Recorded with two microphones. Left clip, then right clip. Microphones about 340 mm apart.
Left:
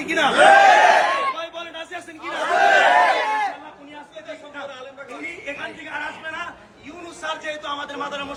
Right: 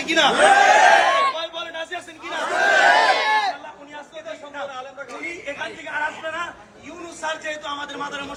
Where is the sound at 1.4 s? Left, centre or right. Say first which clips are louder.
Right 2 dB; right.